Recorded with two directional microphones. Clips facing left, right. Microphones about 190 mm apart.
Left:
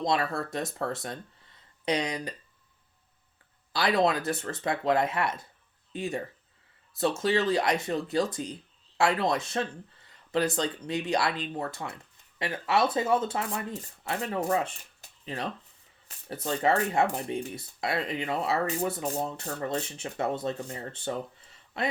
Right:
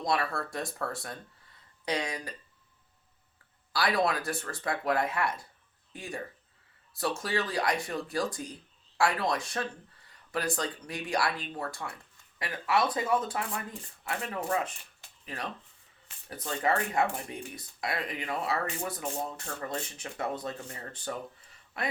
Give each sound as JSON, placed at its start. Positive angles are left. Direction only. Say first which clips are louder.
{"t": 0.0, "sound": "speech", "louder": "left 3 dB", "side_deg": 20}
{"t": 3.7, "sound": "speech", "louder": "left 3 dB", "side_deg": 20}